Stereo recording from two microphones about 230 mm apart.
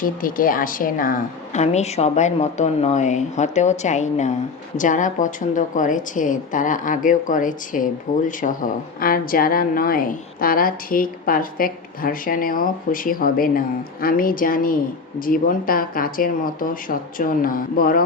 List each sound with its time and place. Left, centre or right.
0.0 s a woman's voice: left